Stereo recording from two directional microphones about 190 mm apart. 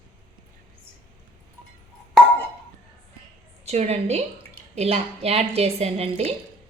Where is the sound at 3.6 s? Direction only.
35° right (ahead or behind).